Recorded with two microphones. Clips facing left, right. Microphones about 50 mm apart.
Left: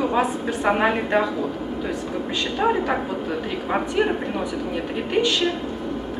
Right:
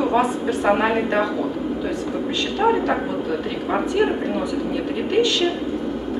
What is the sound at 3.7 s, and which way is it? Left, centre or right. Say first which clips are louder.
Speech: right 2 dB; centre.